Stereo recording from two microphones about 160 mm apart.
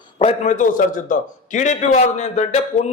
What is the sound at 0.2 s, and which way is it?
A man's voice, 50° left (ahead or behind).